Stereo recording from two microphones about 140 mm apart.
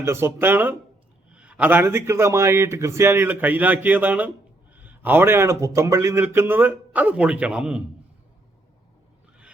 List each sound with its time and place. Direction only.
0.0 s speech: 20° right (ahead or behind)